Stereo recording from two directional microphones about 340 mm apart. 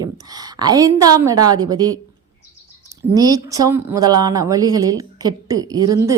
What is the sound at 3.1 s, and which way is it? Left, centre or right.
A woman's voice, centre.